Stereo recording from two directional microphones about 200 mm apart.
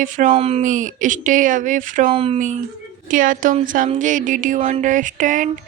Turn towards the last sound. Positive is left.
turn(degrees=-40)  # may be behind; listen again after turning